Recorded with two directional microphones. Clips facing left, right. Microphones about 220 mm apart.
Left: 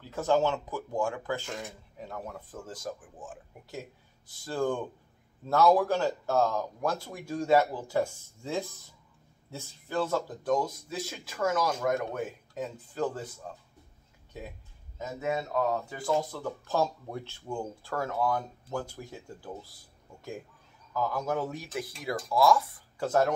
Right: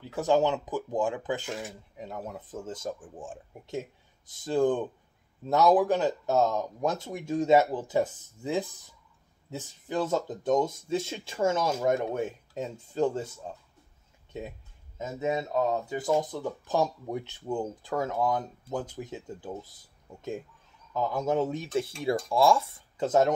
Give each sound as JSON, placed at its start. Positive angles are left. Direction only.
{"t": 0.1, "sound": "speech", "side_deg": -15}
{"t": 15.0, "sound": "speech", "side_deg": -20}